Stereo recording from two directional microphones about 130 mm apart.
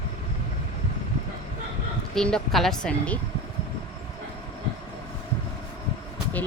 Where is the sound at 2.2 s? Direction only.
5° left (ahead or behind).